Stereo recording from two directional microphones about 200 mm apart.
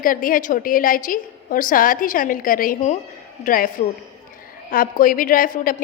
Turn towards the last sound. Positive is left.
turn(degrees=40)  # may be behind; listen again after turning